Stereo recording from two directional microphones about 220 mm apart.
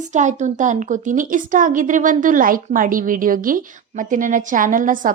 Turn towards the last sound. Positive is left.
turn(degrees=-35)  # may be behind; listen again after turning